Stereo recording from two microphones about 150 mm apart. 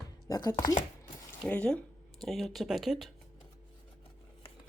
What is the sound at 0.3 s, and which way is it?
Speech, 25° left (ahead or behind).